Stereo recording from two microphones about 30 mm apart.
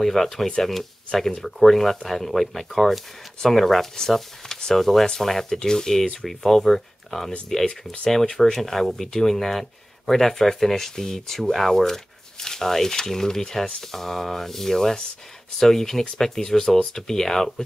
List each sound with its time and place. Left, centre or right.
0.0 s speech: centre
4.5 s a sound: left
4.7 s speech: centre
5.5 s speech: left
6.2 s speech: centre
11.5 s a sound: centre
12.6 s speech: centre